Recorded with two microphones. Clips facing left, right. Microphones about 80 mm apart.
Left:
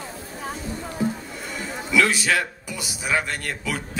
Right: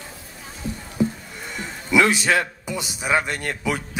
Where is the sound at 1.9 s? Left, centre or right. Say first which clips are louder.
Right 2 dB; right.